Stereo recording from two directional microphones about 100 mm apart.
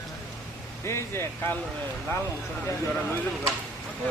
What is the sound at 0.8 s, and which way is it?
Speech, 25° left (ahead or behind).